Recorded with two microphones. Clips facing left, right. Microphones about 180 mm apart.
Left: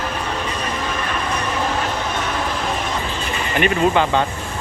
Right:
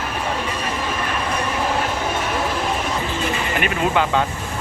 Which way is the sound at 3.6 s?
5° right (ahead or behind).